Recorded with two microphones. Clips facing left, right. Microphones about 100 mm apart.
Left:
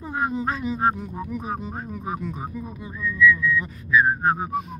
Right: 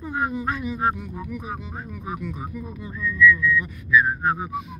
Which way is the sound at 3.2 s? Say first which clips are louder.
Right 1 dB; 25° left (ahead or behind).